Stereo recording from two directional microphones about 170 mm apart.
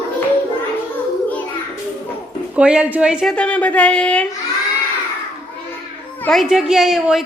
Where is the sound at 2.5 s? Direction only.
5° right (ahead or behind).